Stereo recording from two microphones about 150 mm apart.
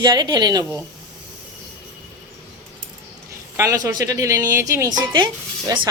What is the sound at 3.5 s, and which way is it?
Speech, 20° right (ahead or behind).